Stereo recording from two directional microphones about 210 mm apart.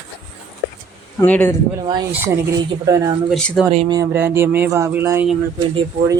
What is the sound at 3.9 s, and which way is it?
Speech, 15° right (ahead or behind).